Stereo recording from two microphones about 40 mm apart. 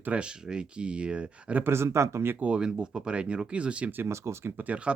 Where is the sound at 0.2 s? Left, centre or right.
Right.